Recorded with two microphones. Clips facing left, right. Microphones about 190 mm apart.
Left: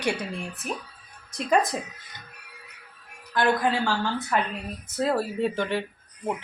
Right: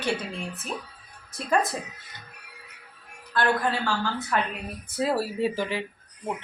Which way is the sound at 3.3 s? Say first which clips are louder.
Left 2 dB; 15° left (ahead or behind).